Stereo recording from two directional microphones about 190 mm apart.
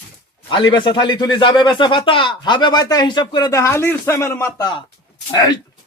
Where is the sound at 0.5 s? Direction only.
25° left (ahead or behind).